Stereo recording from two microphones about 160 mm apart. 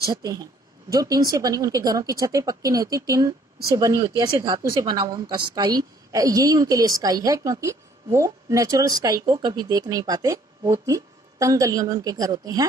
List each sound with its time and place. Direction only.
0.1 s a woman's voice: 25° right (ahead or behind)